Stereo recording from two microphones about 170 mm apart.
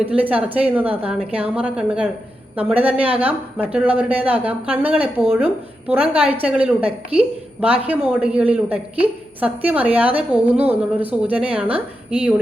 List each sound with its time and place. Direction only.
0.1 s a woman's voice: 10° right (ahead or behind)
6.8 s a woman's voice: 35° right (ahead or behind)
7.6 s a woman's voice: 10° right (ahead or behind)